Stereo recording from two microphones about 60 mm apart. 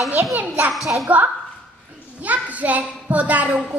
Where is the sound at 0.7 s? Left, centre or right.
Centre.